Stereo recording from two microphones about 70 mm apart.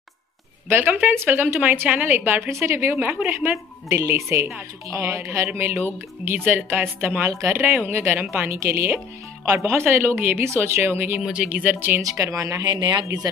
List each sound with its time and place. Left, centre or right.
0.7 s a woman's voice: right
2.5 s a woman's voice: right
3.3 s a woman's voice: right
5.5 s a woman's voice: right
11.1 s speech: centre
11.4 s a woman's voice: right
12.0 s speech: right